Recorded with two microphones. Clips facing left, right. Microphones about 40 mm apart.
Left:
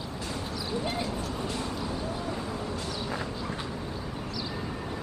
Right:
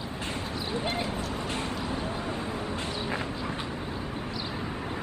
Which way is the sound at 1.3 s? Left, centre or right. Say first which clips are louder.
Right 1 dB; right.